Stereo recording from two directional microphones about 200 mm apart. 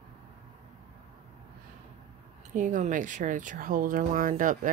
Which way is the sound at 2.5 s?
40° right (ahead or behind).